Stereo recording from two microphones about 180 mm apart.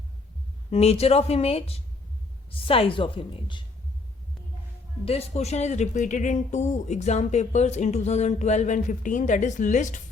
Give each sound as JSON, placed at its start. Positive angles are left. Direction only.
{"t": 0.7, "sound": "speech", "side_deg": 35}
{"t": 5.0, "sound": "speech", "side_deg": 35}